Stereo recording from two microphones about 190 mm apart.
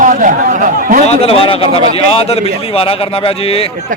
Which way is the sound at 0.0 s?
45° right (ahead or behind).